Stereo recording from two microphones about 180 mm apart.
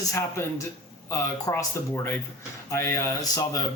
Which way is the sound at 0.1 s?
15° left (ahead or behind).